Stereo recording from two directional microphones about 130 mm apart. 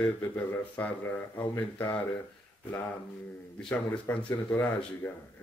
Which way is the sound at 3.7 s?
15° left (ahead or behind).